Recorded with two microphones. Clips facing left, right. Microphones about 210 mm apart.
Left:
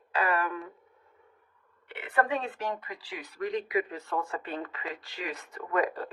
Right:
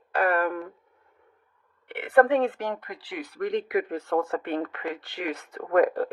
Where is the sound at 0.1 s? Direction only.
55° right (ahead or behind).